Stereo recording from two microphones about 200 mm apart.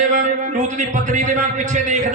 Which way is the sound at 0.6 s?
40° right (ahead or behind).